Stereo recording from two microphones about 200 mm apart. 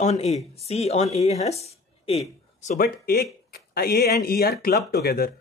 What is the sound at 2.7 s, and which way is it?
Speech, 50° left (ahead or behind).